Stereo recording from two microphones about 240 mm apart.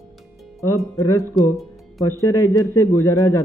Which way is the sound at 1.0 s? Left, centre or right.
Centre.